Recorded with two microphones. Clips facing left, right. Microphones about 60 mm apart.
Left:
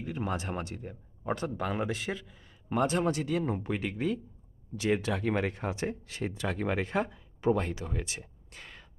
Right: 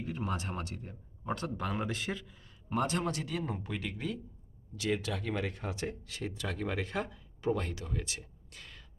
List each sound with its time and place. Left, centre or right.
0.0 s speech: centre